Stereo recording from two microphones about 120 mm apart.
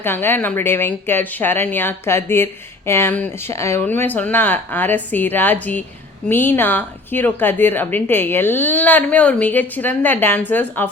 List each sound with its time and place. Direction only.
0.0 s a woman's voice: 20° left (ahead or behind)